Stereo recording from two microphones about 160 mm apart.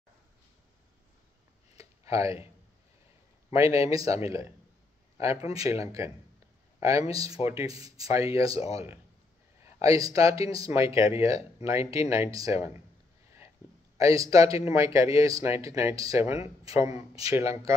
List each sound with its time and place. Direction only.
1.8 s a sound: 20° right (ahead or behind)
3.5 s speech: 20° right (ahead or behind)
5.1 s a sound: 20° right (ahead or behind)
5.5 s speech: 20° right (ahead or behind)
8.5 s speech: 40° left (ahead or behind)
9.8 s speech: 20° right (ahead or behind)
13.9 s speech: 20° right (ahead or behind)